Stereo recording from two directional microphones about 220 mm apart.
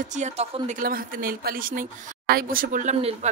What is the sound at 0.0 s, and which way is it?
Speech, 35° right (ahead or behind).